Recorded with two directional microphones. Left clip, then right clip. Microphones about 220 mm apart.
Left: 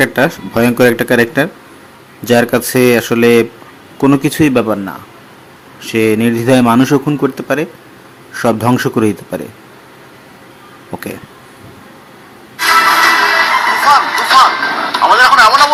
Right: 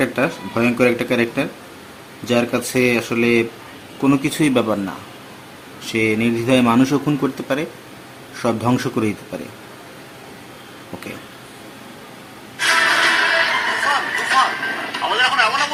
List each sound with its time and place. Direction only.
0.0 s speech: 35° left (ahead or behind)
5.8 s speech: 30° left (ahead or behind)
12.5 s music: 30° left (ahead or behind)